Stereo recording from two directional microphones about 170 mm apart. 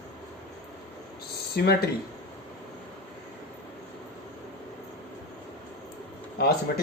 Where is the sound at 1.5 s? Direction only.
70° left (ahead or behind).